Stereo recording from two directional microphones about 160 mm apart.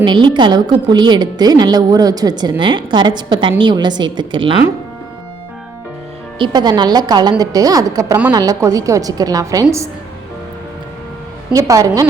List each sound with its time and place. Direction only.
0.0 s a woman's voice: 30° right (ahead or behind)
6.4 s a woman's voice: 25° right (ahead or behind)
11.5 s a woman's voice: 20° right (ahead or behind)